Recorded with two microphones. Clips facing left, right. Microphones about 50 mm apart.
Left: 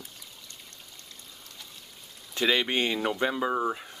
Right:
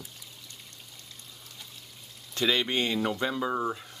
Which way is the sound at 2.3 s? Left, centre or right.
Centre.